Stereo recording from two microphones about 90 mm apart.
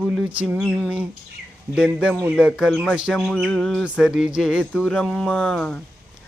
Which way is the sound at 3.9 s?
5° right (ahead or behind).